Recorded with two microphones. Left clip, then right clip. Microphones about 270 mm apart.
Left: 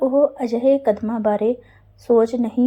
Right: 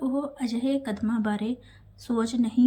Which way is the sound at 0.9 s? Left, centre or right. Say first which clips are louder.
Left 10 dB; centre.